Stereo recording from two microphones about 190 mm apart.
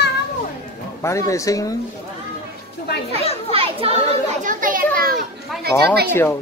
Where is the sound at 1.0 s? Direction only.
15° left (ahead or behind).